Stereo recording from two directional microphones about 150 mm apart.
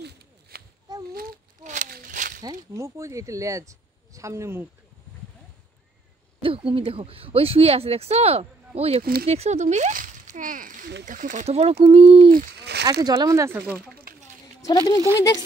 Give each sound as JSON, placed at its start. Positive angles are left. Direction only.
{"t": 0.0, "sound": "a sound", "side_deg": -90}
{"t": 1.1, "sound": "a sound", "side_deg": -65}
{"t": 2.4, "sound": "speech", "side_deg": -20}
{"t": 6.4, "sound": "speech", "side_deg": -35}
{"t": 9.0, "sound": "speech", "side_deg": -80}
{"t": 9.3, "sound": "speech", "side_deg": -45}
{"t": 12.3, "sound": "speech", "side_deg": -80}
{"t": 13.0, "sound": "speech", "side_deg": -25}
{"t": 14.1, "sound": "a sound", "side_deg": -75}
{"t": 14.6, "sound": "speech", "side_deg": 25}